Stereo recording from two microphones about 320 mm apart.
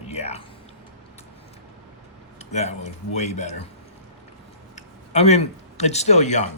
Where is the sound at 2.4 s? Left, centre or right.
Left.